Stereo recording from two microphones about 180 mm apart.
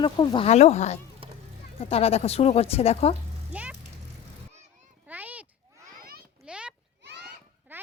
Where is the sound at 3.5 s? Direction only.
5° right (ahead or behind).